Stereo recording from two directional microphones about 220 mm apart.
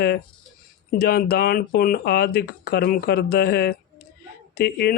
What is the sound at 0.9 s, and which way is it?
Speech, 45° left (ahead or behind).